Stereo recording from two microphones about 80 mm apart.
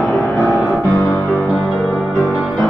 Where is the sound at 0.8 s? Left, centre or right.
Left.